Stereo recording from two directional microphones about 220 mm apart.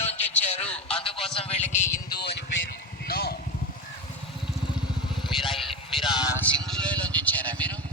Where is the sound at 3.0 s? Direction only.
45° left (ahead or behind).